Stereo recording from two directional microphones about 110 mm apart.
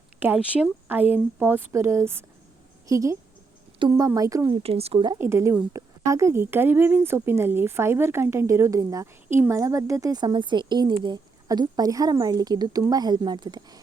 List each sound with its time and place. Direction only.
0.3 s speech: 5° right (ahead or behind)
1.1 s a woman's voice: 20° right (ahead or behind)
4.5 s speech: 65° right (ahead or behind)
5.1 s a woman's voice: 25° right (ahead or behind); by 13.7 s 40° right (ahead or behind)